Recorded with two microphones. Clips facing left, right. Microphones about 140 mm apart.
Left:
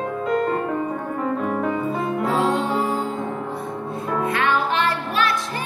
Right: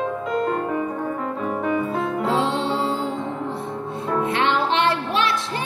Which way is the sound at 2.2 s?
25° right (ahead or behind).